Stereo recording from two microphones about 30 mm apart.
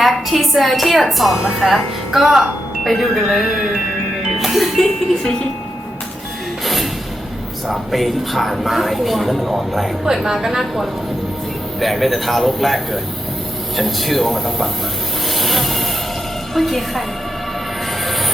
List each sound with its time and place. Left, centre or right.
0.0 s a woman's voice: centre
3.5 s music: right
4.4 s speech: centre
7.7 s a woman's voice: centre
15.4 s vehicle: centre
16.6 s a woman's voice: centre